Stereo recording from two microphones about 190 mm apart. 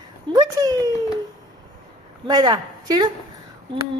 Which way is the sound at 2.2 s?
20° right (ahead or behind).